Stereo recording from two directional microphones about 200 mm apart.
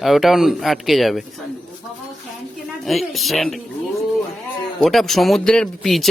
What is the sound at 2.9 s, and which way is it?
Speech, centre (ahead or behind).